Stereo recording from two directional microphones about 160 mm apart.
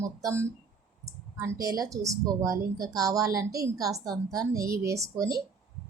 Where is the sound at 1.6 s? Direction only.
20° right (ahead or behind).